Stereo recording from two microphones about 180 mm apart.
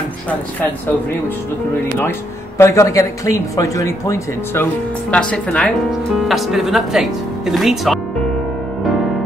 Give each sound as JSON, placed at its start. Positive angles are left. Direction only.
{"t": 2.0, "sound": "speech", "side_deg": 15}
{"t": 5.1, "sound": "speech", "side_deg": 5}